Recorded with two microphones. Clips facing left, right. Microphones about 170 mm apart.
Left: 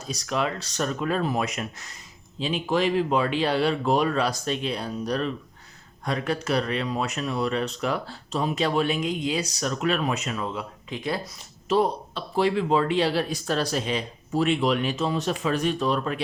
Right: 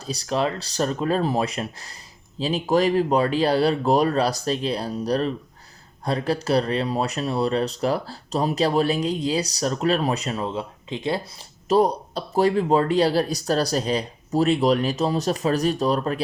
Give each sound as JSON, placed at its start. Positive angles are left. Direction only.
{"t": 0.0, "sound": "speech", "side_deg": -30}
{"t": 11.7, "sound": "speech", "side_deg": -40}